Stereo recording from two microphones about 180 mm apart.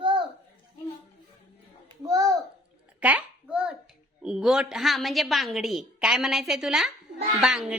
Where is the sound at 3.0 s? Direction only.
5° right (ahead or behind).